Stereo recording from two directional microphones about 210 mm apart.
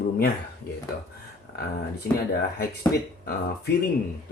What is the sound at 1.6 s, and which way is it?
Speech, 50° left (ahead or behind).